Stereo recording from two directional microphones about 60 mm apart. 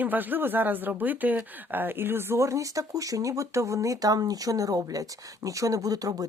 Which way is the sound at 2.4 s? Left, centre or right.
Right.